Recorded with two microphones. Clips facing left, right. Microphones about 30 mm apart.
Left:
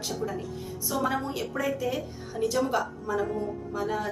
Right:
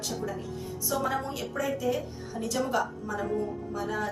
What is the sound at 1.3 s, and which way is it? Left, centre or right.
Speech, centre.